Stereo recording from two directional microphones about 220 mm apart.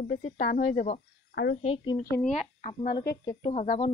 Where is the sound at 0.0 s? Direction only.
40° left (ahead or behind).